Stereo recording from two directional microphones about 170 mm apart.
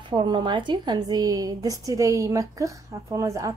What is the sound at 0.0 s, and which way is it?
A woman's voice, 30° right (ahead or behind).